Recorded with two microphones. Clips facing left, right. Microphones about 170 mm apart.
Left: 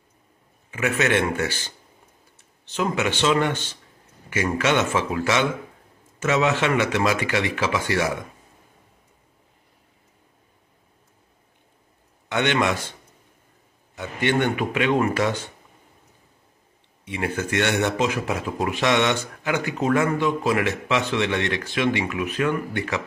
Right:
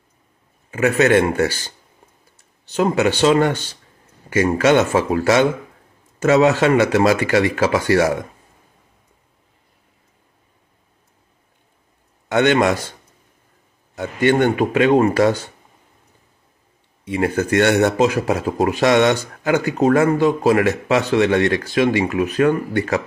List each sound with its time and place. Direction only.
0.7 s a man's voice: 40° right (ahead or behind)
12.3 s speech: 40° right (ahead or behind)
13.9 s speech: 45° right (ahead or behind)
17.1 s speech: 40° right (ahead or behind)